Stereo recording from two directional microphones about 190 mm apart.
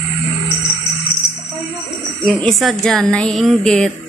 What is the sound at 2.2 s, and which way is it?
A woman's voice, centre (ahead or behind).